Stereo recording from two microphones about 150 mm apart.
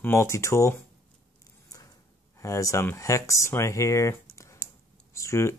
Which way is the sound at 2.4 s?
20° left (ahead or behind).